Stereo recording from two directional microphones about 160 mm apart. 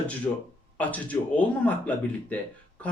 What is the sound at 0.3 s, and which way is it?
Speech, 15° left (ahead or behind).